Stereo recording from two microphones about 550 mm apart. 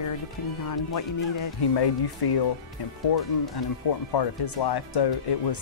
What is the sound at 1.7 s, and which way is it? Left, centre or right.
Speech, left.